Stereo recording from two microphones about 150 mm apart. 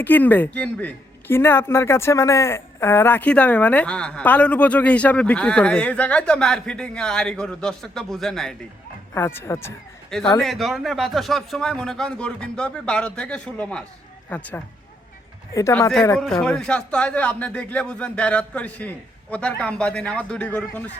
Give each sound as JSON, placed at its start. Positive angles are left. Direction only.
{"t": 0.0, "sound": "speech", "side_deg": 10}
{"t": 9.1, "sound": "speech", "side_deg": 15}
{"t": 10.1, "sound": "a man's voice", "side_deg": 5}
{"t": 16.1, "sound": "speech", "side_deg": 5}